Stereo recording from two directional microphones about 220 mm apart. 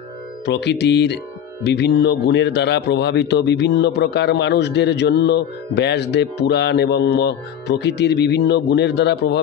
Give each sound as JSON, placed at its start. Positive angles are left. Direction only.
{"t": 0.5, "sound": "speech", "side_deg": 50}